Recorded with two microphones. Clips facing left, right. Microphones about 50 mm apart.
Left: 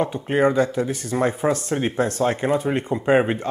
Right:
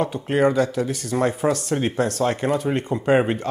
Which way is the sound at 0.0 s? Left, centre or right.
Centre.